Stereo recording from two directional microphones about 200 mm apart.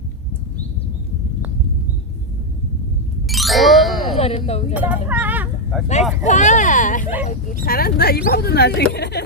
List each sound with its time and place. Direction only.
3.2 s ding: centre (ahead or behind)
4.0 s music: 30° left (ahead or behind)
4.7 s speech: 5° right (ahead or behind)
5.0 s a sound: 10° right (ahead or behind)
6.2 s speech: 35° left (ahead or behind); by 9.2 s 55° left (ahead or behind)